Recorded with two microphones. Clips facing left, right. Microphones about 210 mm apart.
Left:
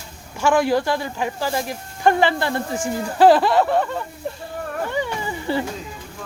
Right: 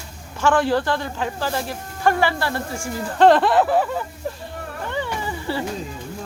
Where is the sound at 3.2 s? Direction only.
5° left (ahead or behind).